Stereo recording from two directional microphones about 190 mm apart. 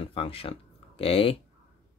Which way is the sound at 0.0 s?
30° left (ahead or behind).